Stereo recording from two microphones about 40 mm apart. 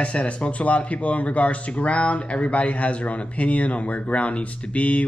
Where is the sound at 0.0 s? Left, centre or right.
Left.